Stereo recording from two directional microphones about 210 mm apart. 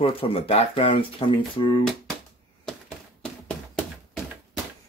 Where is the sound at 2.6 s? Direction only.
5° left (ahead or behind).